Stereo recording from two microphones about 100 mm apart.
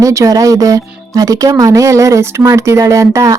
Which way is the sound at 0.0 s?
30° right (ahead or behind).